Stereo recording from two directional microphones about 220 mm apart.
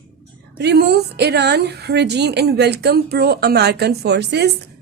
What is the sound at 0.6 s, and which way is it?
A woman's voice, 50° right (ahead or behind).